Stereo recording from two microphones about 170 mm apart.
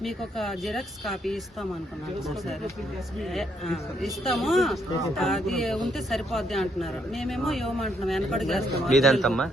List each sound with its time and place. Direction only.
0.0 s speech: centre (ahead or behind)
3.3 s speech: centre (ahead or behind)